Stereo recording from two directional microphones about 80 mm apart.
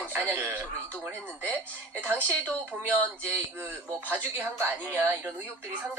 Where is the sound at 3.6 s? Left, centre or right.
Right.